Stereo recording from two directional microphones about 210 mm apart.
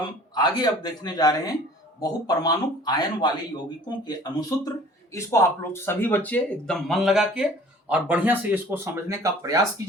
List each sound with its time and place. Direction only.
0.3 s speech: 20° left (ahead or behind); by 9.8 s 15° right (ahead or behind)